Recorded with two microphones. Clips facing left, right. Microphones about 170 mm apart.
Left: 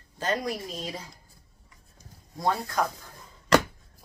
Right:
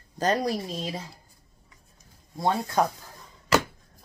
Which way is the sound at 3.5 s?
5° right (ahead or behind).